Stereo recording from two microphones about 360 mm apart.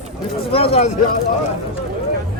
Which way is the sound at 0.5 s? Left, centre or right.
Centre.